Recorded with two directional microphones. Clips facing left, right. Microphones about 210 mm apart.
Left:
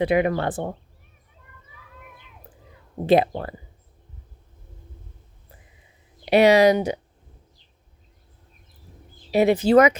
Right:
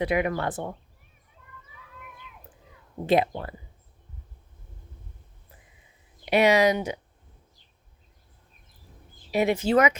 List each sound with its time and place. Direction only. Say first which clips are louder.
0.0 s speech: left 5 dB; 30° left (ahead or behind)
3.1 s speech: left 4 dB; 35° left (ahead or behind)
6.2 s speech: left 5 dB; 35° left (ahead or behind)
9.3 s speech: left 6 dB; 35° left (ahead or behind)